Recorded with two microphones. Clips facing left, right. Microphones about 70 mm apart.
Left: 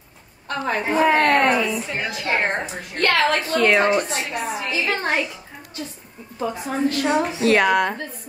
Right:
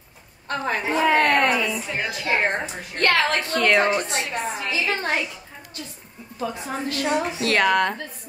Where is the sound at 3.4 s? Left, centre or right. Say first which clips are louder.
Left 2 dB; centre.